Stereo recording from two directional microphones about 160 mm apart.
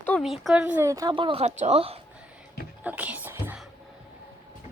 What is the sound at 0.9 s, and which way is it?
Speech, 25° right (ahead or behind).